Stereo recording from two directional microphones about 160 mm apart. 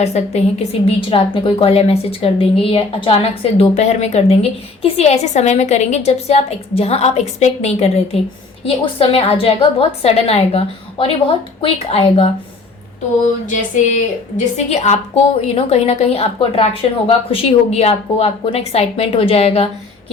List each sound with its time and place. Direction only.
0.0 s a woman's voice: 40° left (ahead or behind)
13.5 s a sound: 55° left (ahead or behind)
14.3 s a woman's voice: 45° left (ahead or behind)